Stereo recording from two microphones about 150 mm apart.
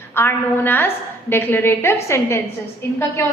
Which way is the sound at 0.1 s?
15° left (ahead or behind).